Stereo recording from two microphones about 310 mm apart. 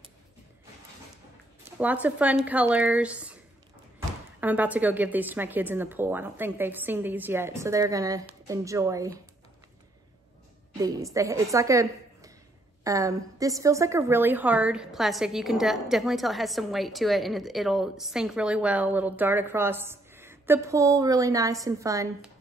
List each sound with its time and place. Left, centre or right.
1.8 s a woman's voice: centre
4.4 s speech: centre
10.8 s a woman's voice: centre